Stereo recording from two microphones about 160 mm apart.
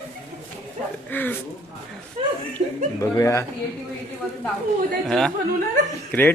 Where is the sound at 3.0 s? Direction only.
20° left (ahead or behind).